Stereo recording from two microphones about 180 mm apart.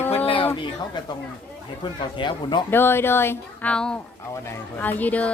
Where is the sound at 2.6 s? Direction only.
10° left (ahead or behind).